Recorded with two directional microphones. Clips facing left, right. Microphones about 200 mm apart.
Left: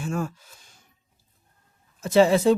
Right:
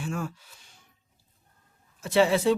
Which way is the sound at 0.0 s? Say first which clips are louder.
Left 4 dB; 45° left (ahead or behind).